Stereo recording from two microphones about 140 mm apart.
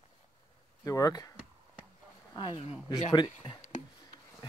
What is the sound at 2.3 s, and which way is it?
Speech, 35° left (ahead or behind).